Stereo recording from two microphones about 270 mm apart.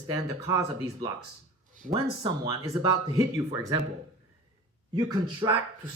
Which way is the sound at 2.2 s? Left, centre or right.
Centre.